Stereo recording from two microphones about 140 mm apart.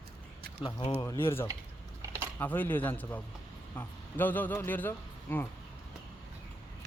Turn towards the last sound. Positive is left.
turn(degrees=15)  # may be behind; listen again after turning